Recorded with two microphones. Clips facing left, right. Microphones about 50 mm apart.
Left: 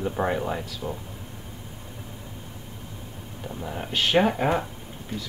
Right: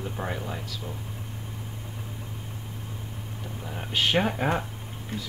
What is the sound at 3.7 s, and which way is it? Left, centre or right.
Speech, centre.